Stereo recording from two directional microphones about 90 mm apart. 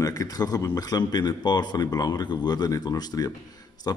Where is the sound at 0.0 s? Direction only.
40° left (ahead or behind).